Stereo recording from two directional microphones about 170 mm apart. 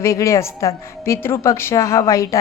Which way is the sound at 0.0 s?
20° left (ahead or behind).